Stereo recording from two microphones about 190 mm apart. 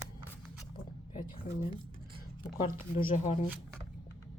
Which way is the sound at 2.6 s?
30° left (ahead or behind).